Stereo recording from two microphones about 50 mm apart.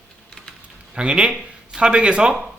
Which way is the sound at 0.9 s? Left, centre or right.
Centre.